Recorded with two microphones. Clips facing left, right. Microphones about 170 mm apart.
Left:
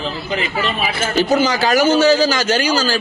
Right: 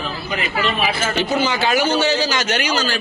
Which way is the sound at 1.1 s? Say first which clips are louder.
Left 8 dB; 40° left (ahead or behind).